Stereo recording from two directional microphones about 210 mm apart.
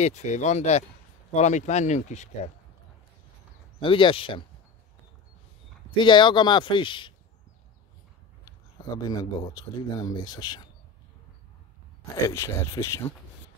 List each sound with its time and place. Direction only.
0.0 s speech: 35° left (ahead or behind)
3.8 s speech: 25° left (ahead or behind)
5.9 s speech: 20° left (ahead or behind)
8.9 s speech: 15° left (ahead or behind)
12.3 s speech: 15° left (ahead or behind)